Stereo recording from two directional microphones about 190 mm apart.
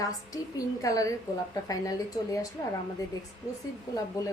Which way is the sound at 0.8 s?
15° left (ahead or behind).